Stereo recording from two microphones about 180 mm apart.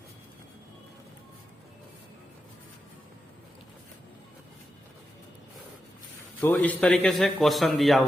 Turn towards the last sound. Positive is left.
turn(degrees=0)  # may be behind; listen again after turning